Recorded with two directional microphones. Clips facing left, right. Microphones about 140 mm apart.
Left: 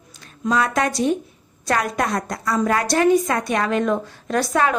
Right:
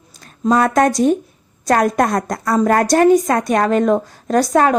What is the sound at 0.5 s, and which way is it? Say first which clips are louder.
A woman's voice: right 6 dB; 45° right (ahead or behind).